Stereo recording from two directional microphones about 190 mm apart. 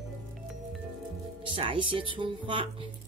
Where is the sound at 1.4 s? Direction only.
25° right (ahead or behind).